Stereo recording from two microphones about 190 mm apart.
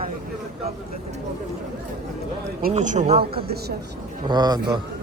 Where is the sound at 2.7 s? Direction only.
40° right (ahead or behind).